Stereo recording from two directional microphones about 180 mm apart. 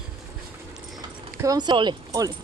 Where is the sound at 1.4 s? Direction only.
20° right (ahead or behind).